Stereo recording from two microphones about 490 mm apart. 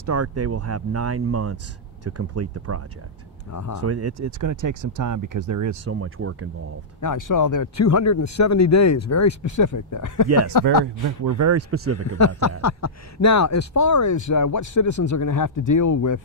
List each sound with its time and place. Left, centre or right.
0.0 s speech: right
3.5 s speech: left
3.8 s speech: right
7.0 s speech: left
11.3 s speech: right
12.2 s speech: left